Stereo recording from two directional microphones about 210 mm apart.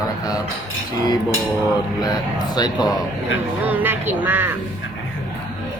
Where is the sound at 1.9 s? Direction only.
20° left (ahead or behind).